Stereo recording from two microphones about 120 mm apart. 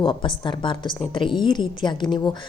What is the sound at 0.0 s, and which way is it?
A woman's voice, 45° left (ahead or behind).